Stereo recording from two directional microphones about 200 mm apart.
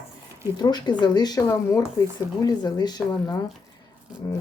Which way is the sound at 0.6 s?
20° left (ahead or behind).